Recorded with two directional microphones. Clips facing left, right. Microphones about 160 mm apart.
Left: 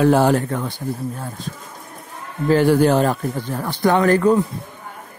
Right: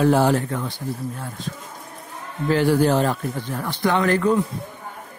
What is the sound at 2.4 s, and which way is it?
Speech, 50° left (ahead or behind).